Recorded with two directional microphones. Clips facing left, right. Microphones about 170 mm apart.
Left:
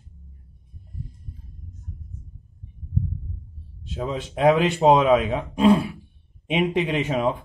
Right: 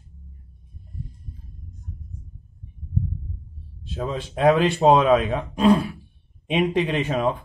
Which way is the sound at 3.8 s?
15° left (ahead or behind).